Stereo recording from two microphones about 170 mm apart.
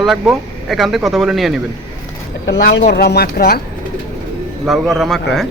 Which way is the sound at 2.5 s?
90° left.